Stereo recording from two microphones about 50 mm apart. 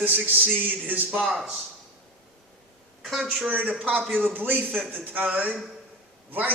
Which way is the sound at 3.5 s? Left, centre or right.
Right.